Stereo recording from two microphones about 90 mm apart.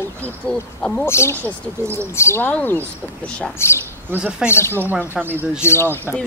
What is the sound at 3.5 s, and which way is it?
Speech, 30° left (ahead or behind).